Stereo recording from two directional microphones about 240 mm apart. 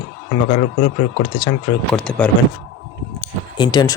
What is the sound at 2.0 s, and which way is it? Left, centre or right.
Speech, centre.